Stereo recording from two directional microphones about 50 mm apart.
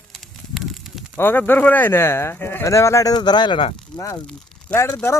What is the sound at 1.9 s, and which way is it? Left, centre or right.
Speech, left.